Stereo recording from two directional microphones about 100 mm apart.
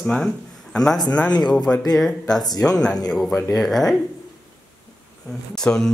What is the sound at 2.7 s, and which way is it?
Speech, 5° left (ahead or behind).